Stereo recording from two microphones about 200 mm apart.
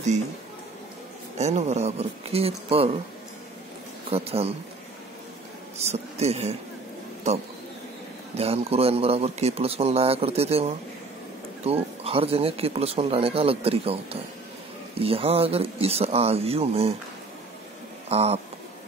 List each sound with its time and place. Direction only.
1.4 s speech: 35° right (ahead or behind)
4.1 s speech: 30° right (ahead or behind)
5.8 s speech: 35° right (ahead or behind)
8.4 s speech: 30° right (ahead or behind)
15.0 s speech: 30° right (ahead or behind)
18.0 s speech: 30° right (ahead or behind)